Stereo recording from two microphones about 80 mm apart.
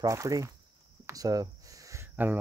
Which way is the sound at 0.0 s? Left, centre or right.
Right.